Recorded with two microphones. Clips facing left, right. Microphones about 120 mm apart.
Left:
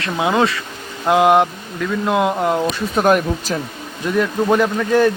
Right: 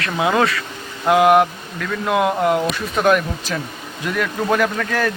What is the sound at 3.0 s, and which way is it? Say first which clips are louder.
Speech: left 1 dB; 40° left (ahead or behind).